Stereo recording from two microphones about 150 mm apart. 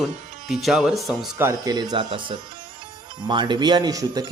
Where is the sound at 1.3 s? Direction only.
20° right (ahead or behind).